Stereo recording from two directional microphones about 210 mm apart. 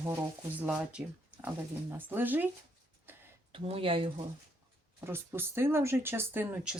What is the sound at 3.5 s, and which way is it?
Speech, 25° right (ahead or behind).